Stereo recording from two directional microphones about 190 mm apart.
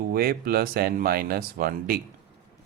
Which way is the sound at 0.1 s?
55° right (ahead or behind).